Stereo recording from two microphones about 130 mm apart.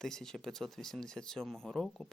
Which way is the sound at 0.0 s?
5° left (ahead or behind).